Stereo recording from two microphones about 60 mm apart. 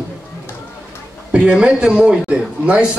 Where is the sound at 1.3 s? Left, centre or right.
Centre.